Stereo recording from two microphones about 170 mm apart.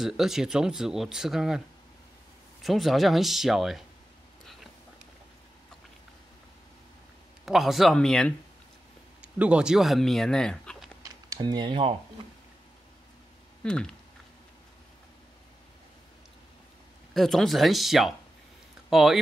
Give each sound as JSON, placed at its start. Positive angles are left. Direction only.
{"t": 0.0, "sound": "speech", "side_deg": 0}
{"t": 2.6, "sound": "speech", "side_deg": 0}
{"t": 7.4, "sound": "speech", "side_deg": 0}
{"t": 11.0, "sound": "a sound", "side_deg": -20}
{"t": 13.7, "sound": "speech", "side_deg": 5}
{"t": 17.1, "sound": "speech", "side_deg": 0}